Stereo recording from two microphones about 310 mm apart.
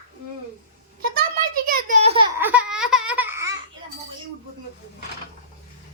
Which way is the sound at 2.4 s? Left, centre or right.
Centre.